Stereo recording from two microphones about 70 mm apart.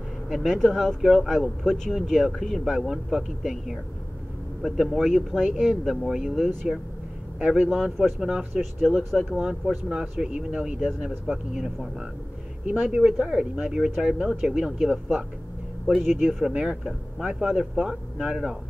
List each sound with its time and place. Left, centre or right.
0.3 s speech: centre
7.3 s speech: centre
8.8 s speech: centre
15.9 s speech: centre